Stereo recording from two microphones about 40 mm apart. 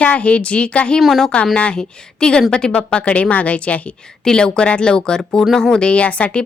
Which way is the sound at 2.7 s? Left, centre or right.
Left.